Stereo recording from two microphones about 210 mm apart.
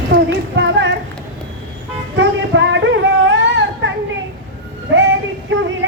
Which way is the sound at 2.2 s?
60° right (ahead or behind).